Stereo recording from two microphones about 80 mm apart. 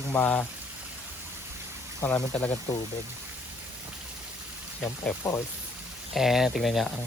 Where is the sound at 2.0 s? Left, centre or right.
Left.